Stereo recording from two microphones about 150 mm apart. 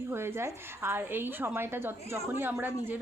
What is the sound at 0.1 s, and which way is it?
A woman's voice, 15° right (ahead or behind).